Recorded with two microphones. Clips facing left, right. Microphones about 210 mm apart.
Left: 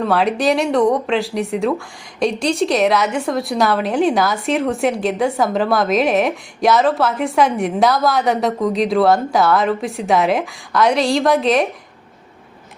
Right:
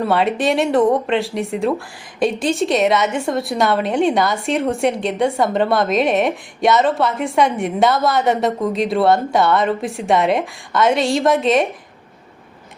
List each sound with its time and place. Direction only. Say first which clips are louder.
0.0 s a woman's voice: left 1 dB; centre (ahead or behind)